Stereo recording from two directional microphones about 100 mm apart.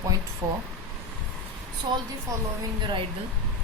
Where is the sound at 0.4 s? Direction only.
40° right (ahead or behind).